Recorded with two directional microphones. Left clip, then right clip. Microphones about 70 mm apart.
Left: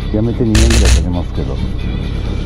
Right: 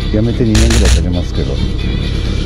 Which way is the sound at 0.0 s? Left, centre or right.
Right.